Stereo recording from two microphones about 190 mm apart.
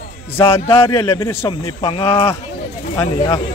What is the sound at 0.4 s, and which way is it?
Speech, 30° left (ahead or behind).